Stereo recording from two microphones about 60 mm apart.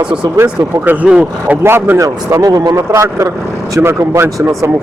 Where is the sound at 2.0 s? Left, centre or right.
Right.